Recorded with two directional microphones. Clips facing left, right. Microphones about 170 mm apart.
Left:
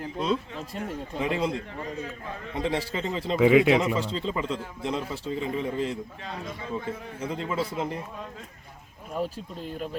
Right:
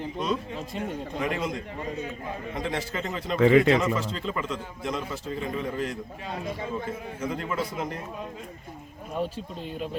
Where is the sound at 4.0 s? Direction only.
30° left (ahead or behind).